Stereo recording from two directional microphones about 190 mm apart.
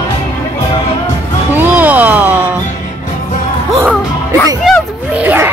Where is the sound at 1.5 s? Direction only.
10° right (ahead or behind).